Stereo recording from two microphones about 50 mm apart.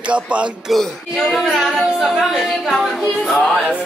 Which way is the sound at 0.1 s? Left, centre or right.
Right.